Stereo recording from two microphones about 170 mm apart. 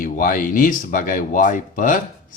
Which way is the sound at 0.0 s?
50° left (ahead or behind).